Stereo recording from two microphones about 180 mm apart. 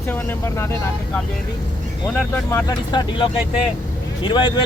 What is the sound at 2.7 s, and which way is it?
Speech, 25° left (ahead or behind).